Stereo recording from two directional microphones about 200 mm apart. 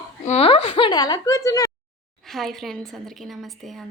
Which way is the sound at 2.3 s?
Centre (ahead or behind).